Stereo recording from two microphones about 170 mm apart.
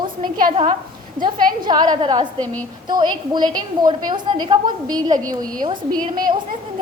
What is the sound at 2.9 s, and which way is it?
A woman's voice, 25° right (ahead or behind).